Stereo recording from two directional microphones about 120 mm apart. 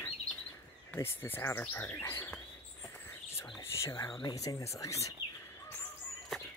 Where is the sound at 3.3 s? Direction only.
25° left (ahead or behind).